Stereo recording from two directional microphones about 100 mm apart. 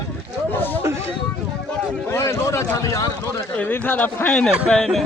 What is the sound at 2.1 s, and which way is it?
Speech, 30° left (ahead or behind).